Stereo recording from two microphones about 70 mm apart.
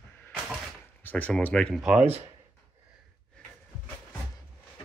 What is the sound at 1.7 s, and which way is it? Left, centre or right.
Speech, centre.